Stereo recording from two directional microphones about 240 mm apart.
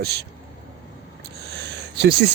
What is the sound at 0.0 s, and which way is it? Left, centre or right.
Speech, right.